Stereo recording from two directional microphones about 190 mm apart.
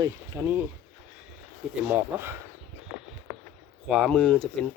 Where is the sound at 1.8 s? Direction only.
10° right (ahead or behind).